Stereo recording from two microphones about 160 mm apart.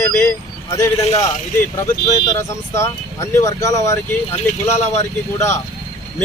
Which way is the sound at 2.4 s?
15° left (ahead or behind).